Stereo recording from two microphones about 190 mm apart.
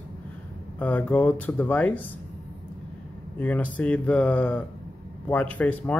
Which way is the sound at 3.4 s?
10° left (ahead or behind).